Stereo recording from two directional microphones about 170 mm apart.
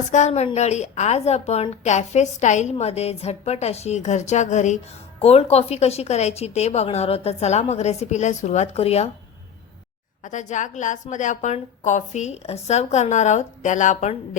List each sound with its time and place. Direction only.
0.1 s a woman's voice: 45° left (ahead or behind)
10.2 s a woman's voice: 45° left (ahead or behind)